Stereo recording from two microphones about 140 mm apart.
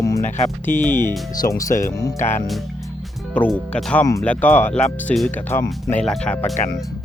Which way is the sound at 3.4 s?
10° left (ahead or behind).